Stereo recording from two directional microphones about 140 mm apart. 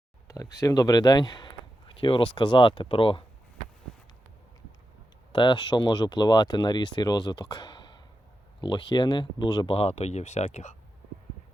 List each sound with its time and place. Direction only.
0.3 s speech: 25° left (ahead or behind); by 3.2 s 40° left (ahead or behind)
5.3 s speech: 35° left (ahead or behind)
9.7 s speech: 50° left (ahead or behind)